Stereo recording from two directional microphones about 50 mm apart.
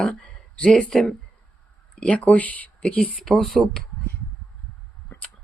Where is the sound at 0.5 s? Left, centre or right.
Centre.